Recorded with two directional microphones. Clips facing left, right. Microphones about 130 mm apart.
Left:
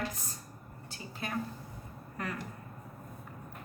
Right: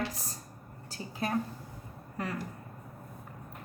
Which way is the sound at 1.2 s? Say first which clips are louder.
Right 6 dB; 40° right (ahead or behind).